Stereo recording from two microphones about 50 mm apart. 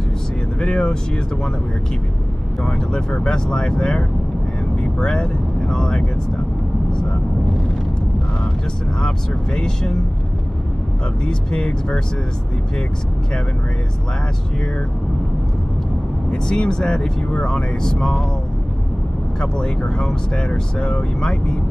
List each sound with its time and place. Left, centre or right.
0.6 s speech: centre
2.6 s speech: left
6.9 s vehicle: centre
9.0 s speech: centre
11.2 s speech: centre
16.3 s speech: centre
19.4 s speech: centre